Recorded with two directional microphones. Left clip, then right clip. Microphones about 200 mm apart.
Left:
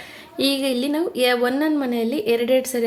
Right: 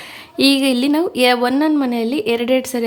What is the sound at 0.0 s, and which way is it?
Speech, 30° right (ahead or behind).